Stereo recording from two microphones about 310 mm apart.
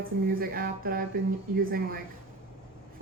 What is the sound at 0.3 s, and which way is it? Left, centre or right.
Speech, right.